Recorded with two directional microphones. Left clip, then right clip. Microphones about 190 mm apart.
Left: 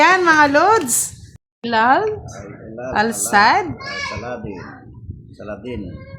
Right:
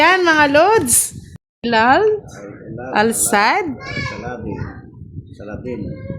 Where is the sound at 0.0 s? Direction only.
20° right (ahead or behind).